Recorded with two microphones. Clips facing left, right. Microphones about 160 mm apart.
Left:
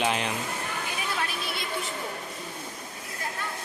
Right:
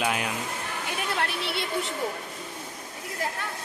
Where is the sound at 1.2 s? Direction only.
70° right (ahead or behind).